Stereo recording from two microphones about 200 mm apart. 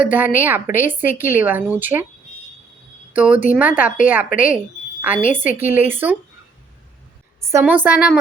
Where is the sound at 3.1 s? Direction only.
5° right (ahead or behind).